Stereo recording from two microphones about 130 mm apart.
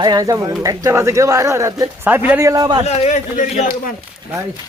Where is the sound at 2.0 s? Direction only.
15° right (ahead or behind).